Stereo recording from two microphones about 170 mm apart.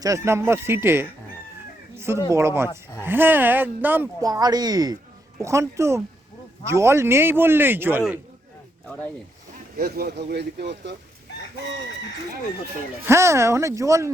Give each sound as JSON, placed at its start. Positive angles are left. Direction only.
{"t": 0.0, "sound": "speech", "side_deg": -15}
{"t": 4.2, "sound": "speech", "side_deg": -20}
{"t": 9.7, "sound": "speech", "side_deg": -65}
{"t": 13.1, "sound": "speech", "side_deg": -15}